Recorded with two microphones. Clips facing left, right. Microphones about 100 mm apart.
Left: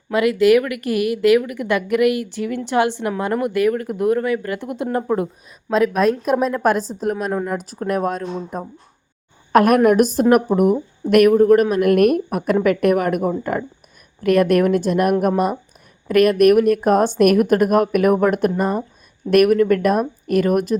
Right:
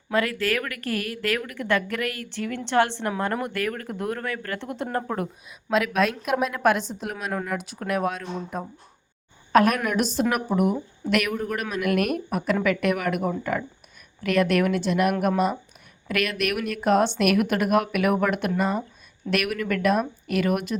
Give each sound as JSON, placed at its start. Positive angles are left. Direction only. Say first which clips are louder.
{"t": 0.1, "sound": "a woman's voice", "louder": "left 10 dB", "side_deg": 15}
{"t": 5.7, "sound": "speech", "louder": "left 6 dB", "side_deg": 40}
{"t": 9.5, "sound": "a woman's voice", "louder": "left 7 dB", "side_deg": 50}